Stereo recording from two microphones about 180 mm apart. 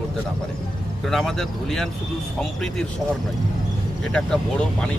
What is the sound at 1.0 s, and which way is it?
Speech, centre (ahead or behind).